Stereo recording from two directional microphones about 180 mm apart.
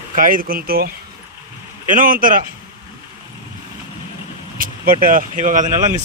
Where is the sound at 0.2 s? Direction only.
50° right (ahead or behind).